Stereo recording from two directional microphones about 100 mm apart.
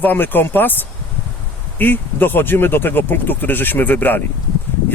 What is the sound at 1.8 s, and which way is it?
Speech, 20° left (ahead or behind).